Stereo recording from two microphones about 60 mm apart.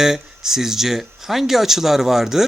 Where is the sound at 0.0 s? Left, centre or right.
Centre.